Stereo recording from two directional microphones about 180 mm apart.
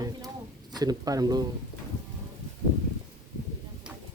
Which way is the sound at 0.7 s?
20° right (ahead or behind).